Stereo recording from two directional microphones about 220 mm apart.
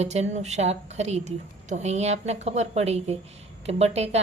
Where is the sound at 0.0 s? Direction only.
30° right (ahead or behind).